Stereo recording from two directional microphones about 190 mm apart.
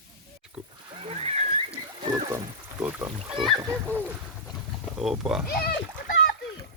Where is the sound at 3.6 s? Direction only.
15° right (ahead or behind).